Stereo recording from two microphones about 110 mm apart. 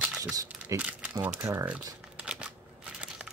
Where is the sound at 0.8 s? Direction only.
10° right (ahead or behind).